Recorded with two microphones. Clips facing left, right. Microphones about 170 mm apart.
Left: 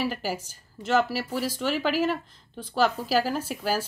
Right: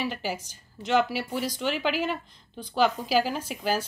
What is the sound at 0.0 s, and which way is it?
Speech, 5° left (ahead or behind).